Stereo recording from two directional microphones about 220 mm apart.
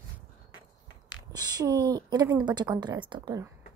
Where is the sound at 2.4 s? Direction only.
20° right (ahead or behind).